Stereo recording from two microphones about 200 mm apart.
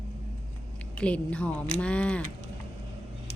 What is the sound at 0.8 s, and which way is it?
Speech, 5° left (ahead or behind).